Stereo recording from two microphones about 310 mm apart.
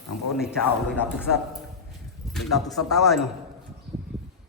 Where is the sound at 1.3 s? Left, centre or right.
Left.